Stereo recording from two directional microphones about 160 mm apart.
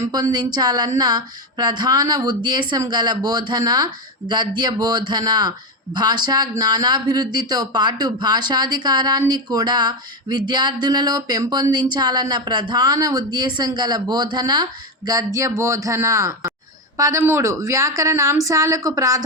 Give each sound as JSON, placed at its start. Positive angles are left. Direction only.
{"t": 0.0, "sound": "speech", "side_deg": -25}